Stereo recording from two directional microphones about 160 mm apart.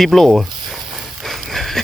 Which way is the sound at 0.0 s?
Centre (ahead or behind).